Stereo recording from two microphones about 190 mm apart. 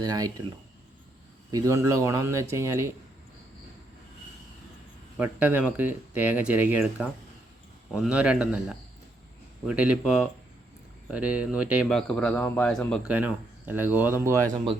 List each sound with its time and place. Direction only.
0.0 s speech: 20° right (ahead or behind)
1.5 s speech: 20° right (ahead or behind)
5.1 s speech: 10° right (ahead or behind)
13.1 s speech: 10° right (ahead or behind)